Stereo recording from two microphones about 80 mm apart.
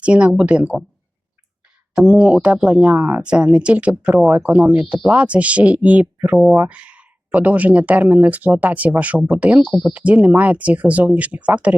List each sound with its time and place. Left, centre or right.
0.0 s speech: centre
2.0 s speech: centre